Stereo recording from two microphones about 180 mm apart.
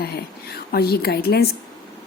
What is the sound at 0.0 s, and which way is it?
Speech, 60° left (ahead or behind).